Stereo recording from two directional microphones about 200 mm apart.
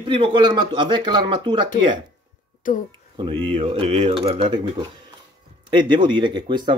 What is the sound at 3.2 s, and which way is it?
Speech, 30° right (ahead or behind).